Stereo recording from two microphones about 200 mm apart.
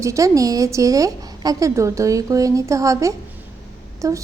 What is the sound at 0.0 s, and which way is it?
A woman's voice, 15° right (ahead or behind).